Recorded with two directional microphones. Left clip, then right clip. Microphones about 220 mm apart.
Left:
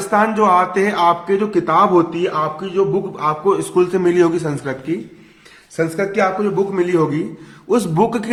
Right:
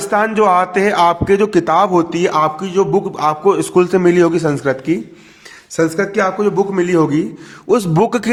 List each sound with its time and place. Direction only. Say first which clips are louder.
0.1 s a man's voice: right 1 dB; 40° right (ahead or behind)
5.7 s a man's voice: right 3 dB; 50° right (ahead or behind)